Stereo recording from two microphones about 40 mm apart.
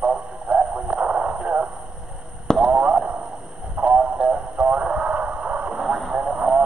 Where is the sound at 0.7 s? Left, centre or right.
Right.